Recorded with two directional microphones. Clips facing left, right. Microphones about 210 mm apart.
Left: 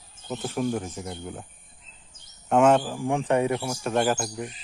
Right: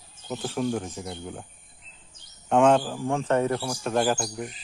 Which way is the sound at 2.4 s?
5° left (ahead or behind).